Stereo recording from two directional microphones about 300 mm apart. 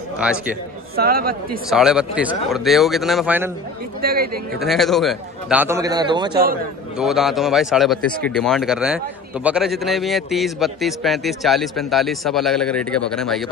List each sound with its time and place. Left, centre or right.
0.9 s speech: right
1.7 s speech: centre
4.0 s speech: right
4.6 s a man's voice: centre
7.0 s speech: centre